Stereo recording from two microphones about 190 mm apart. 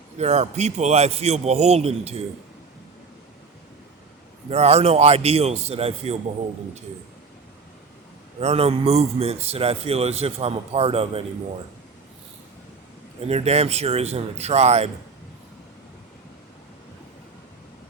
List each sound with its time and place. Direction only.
0.2 s a man's voice: 35° right (ahead or behind)
4.4 s a man's voice: 35° right (ahead or behind)
8.4 s a man's voice: 30° right (ahead or behind)
13.2 s a man's voice: 35° right (ahead or behind)